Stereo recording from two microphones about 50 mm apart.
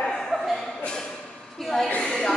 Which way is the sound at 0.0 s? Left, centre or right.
Centre.